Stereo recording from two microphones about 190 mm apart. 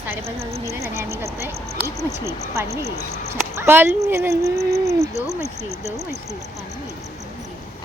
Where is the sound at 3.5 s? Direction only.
10° right (ahead or behind).